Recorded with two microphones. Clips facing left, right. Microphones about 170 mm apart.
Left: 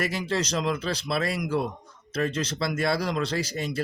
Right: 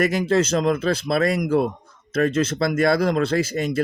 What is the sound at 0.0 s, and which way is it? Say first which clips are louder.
Speech: right 8 dB; 50° right (ahead or behind).